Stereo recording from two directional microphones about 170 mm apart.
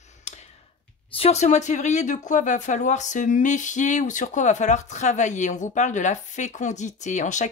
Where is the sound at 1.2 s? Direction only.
40° left (ahead or behind).